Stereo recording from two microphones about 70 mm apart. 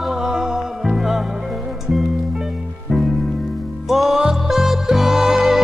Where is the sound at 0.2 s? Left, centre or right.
Centre.